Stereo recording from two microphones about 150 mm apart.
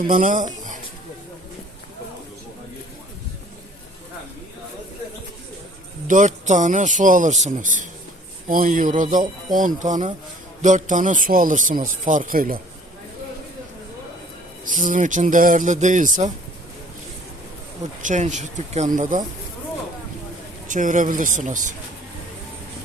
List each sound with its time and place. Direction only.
0.1 s speech: 60° right (ahead or behind)
6.1 s speech: 55° right (ahead or behind); by 12.5 s 70° right (ahead or behind)
14.6 s speech: 60° right (ahead or behind)
18.0 s speech: 55° right (ahead or behind)
20.7 s speech: 60° right (ahead or behind)